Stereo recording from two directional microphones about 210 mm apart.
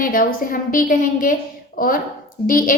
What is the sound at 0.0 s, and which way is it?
A woman's voice, 40° left (ahead or behind).